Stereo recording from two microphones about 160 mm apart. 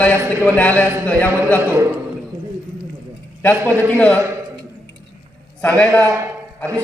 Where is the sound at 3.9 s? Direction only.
10° left (ahead or behind).